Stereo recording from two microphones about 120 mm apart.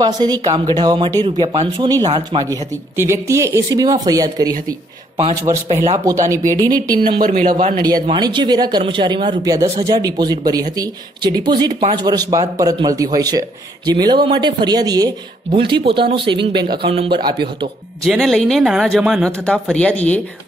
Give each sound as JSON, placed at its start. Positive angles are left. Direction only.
{"t": 0.0, "sound": "speech", "side_deg": -35}
{"t": 3.0, "sound": "speech", "side_deg": -25}
{"t": 6.0, "sound": "speech", "side_deg": -25}
{"t": 15.5, "sound": "speech", "side_deg": -45}
{"t": 17.2, "sound": "speech", "side_deg": -35}
{"t": 18.0, "sound": "speech", "side_deg": 0}
{"t": 19.4, "sound": "speech", "side_deg": 10}